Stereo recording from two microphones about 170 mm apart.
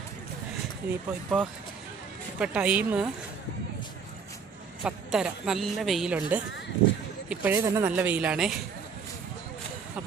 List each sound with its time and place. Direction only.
0.8 s speech: 5° right (ahead or behind)
1.3 s speech: 5° left (ahead or behind)
2.4 s speech: 5° right (ahead or behind)
4.8 s speech: 5° right (ahead or behind)